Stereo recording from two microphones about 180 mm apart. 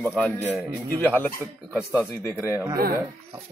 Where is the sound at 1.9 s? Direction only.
15° left (ahead or behind).